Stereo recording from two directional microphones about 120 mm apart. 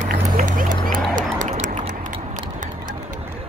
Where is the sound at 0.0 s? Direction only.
90° right.